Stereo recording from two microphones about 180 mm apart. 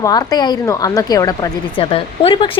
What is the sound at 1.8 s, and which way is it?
Speech, 30° left (ahead or behind).